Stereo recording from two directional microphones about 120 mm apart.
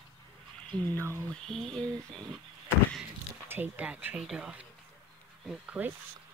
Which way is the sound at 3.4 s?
20° right (ahead or behind).